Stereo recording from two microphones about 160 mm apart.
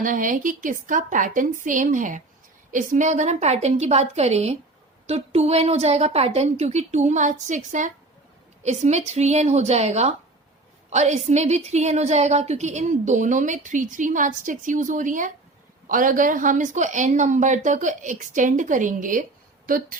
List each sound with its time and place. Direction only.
0.0 s a woman's voice: 55° right (ahead or behind)